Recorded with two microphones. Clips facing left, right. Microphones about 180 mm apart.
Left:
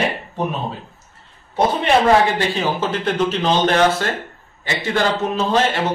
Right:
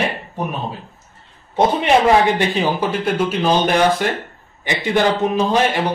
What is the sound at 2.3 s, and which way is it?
A man's voice, 15° right (ahead or behind).